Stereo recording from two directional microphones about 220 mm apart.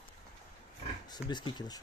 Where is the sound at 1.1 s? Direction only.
20° left (ahead or behind).